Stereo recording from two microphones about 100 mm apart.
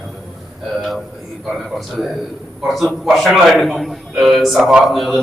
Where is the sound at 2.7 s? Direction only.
Centre (ahead or behind).